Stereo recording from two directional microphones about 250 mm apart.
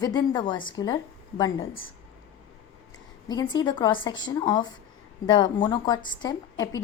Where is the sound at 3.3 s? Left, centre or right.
Centre.